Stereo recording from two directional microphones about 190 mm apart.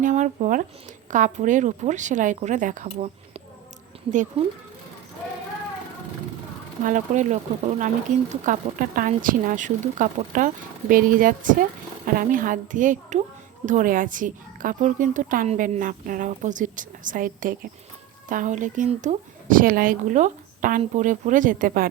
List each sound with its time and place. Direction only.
0.0 s a woman's voice: 40° right (ahead or behind)
6.8 s a woman's voice: 40° right (ahead or behind)